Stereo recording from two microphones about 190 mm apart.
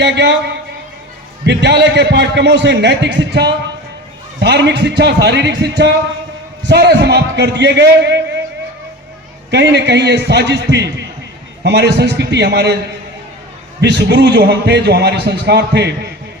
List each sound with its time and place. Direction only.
0.0 s a man's voice: 65° right (ahead or behind)
9.5 s a man's voice: 65° right (ahead or behind)
13.8 s a man's voice: 65° right (ahead or behind)